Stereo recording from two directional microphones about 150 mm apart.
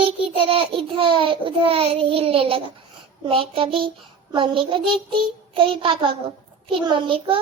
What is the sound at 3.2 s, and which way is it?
A child's voice, 40° right (ahead or behind).